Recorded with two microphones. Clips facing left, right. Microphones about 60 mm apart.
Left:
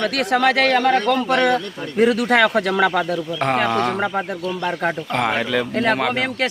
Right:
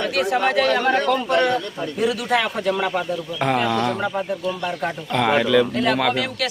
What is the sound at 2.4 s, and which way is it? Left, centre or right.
Speech, left.